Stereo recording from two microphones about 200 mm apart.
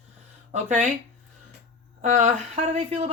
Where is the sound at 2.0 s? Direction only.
40° right (ahead or behind).